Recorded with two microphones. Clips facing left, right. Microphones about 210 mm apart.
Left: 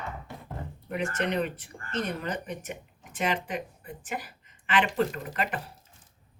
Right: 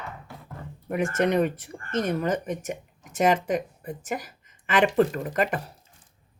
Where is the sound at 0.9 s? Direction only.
50° right (ahead or behind).